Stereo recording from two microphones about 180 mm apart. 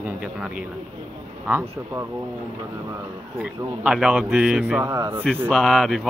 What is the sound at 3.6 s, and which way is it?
A man's voice, 5° right (ahead or behind).